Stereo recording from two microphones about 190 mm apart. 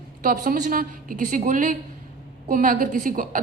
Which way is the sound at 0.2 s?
45° right (ahead or behind).